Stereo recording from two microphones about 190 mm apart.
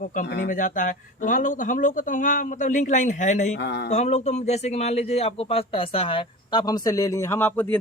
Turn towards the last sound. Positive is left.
turn(degrees=10)  # may be behind; listen again after turning